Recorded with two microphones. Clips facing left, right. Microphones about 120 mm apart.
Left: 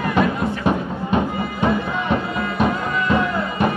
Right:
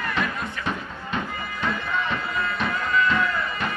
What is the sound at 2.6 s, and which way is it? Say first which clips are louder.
Music: left 3 dB; 25° left (ahead or behind).